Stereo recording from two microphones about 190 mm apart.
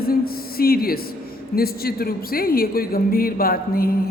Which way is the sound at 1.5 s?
55° left (ahead or behind).